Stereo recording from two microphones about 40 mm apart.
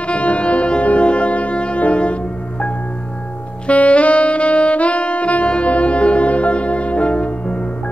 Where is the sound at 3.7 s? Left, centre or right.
Left.